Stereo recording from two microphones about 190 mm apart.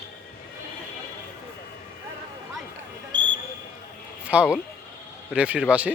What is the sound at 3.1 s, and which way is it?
Basketball bounce, 70° right (ahead or behind).